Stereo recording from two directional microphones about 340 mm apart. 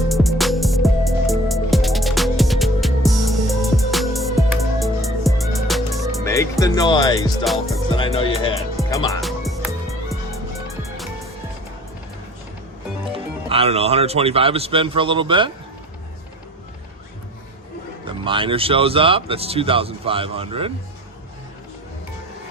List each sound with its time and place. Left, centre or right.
0.1 s music: centre
13.1 s speech: centre
18.0 s speech: centre